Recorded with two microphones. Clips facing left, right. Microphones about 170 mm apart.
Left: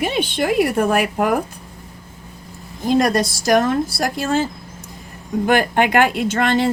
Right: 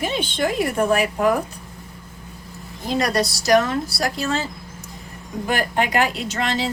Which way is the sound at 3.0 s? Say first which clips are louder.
Left 1 dB; 50° left (ahead or behind).